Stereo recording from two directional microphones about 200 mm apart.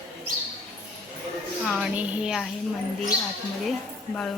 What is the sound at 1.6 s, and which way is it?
Speech, centre (ahead or behind).